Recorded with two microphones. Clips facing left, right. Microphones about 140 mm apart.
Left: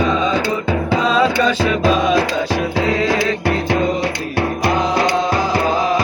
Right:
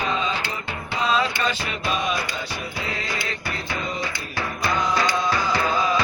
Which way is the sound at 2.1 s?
90° left.